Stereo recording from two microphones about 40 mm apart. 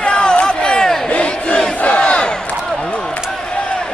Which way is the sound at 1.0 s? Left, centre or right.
Left.